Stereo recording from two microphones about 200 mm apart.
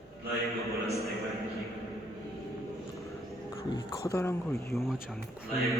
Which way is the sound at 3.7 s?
20° left (ahead or behind).